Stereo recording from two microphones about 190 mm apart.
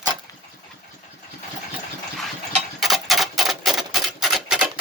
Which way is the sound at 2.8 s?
Centre (ahead or behind).